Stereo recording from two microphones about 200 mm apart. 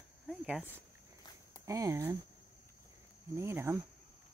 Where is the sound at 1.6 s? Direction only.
15° right (ahead or behind).